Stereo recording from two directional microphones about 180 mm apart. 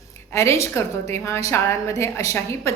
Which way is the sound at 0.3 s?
15° left (ahead or behind).